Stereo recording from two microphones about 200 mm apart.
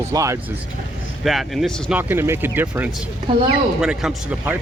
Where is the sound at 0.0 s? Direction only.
15° right (ahead or behind).